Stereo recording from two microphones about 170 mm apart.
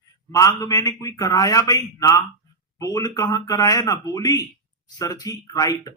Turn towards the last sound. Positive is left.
turn(degrees=20)  # may be behind; listen again after turning